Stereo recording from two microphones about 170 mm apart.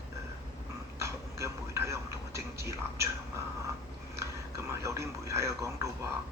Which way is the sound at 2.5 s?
15° right (ahead or behind).